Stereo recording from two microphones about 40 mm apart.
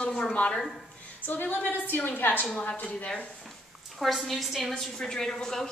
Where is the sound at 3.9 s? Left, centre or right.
Centre.